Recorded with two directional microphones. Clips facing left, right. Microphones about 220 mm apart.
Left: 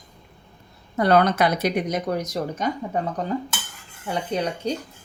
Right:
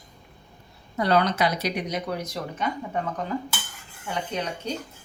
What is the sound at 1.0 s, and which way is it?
A woman's voice, 50° left (ahead or behind).